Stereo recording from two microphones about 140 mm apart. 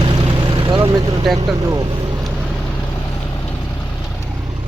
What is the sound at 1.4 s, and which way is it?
Speech, 25° right (ahead or behind).